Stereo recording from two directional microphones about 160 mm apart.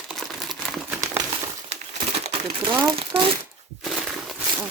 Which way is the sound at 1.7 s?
45° right (ahead or behind).